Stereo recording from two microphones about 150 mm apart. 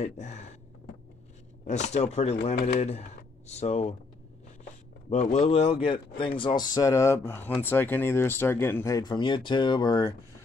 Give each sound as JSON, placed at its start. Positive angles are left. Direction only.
{"t": 0.0, "sound": "speech", "side_deg": 50}
{"t": 1.7, "sound": "speech", "side_deg": 50}
{"t": 5.1, "sound": "speech", "side_deg": 50}